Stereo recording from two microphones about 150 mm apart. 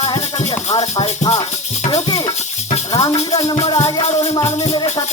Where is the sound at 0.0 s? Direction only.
30° left (ahead or behind).